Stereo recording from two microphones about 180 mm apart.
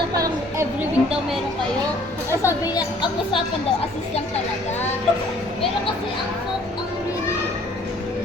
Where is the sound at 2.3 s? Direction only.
15° left (ahead or behind).